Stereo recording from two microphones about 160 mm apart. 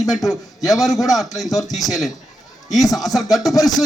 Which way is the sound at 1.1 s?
Centre (ahead or behind).